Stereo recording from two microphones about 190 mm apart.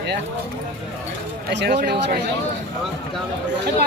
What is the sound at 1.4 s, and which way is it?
Speech, 65° right (ahead or behind).